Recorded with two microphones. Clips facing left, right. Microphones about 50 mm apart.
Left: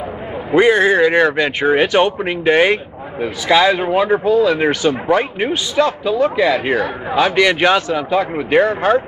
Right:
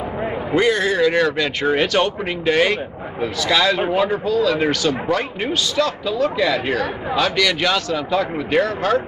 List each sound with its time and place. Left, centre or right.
0.6 s speech: left